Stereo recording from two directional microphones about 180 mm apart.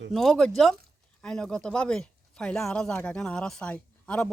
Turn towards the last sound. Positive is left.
turn(degrees=5)  # may be behind; listen again after turning